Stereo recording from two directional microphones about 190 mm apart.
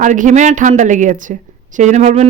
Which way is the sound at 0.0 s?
40° right (ahead or behind).